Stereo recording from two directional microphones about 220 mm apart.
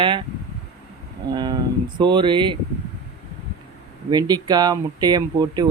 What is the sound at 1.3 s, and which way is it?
Speech, 20° right (ahead or behind).